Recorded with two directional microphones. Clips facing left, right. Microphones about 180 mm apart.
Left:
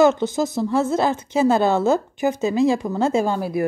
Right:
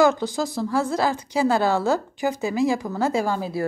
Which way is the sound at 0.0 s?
20° left (ahead or behind).